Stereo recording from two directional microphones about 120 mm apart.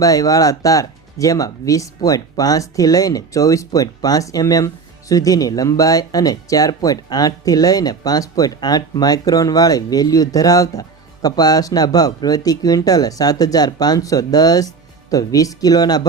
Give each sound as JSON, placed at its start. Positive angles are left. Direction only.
{"t": 0.0, "sound": "speech", "side_deg": 30}